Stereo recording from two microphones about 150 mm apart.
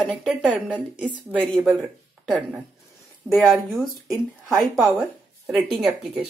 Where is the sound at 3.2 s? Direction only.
Centre (ahead or behind).